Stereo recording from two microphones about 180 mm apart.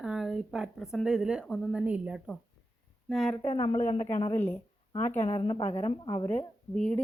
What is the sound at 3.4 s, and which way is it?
Speech, 30° left (ahead or behind).